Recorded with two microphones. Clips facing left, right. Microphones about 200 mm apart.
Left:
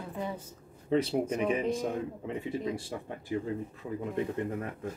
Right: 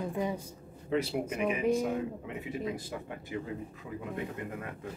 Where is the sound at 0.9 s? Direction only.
35° left (ahead or behind).